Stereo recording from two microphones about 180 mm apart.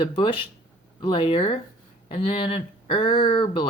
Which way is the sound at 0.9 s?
25° left (ahead or behind).